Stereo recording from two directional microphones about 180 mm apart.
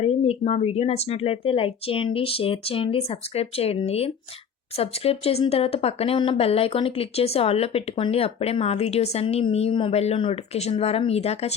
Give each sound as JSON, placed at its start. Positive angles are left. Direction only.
{"t": 0.0, "sound": "speech", "side_deg": 35}